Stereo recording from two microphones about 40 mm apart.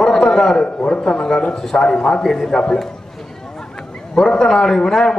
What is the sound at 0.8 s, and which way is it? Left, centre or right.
A man's voice, left.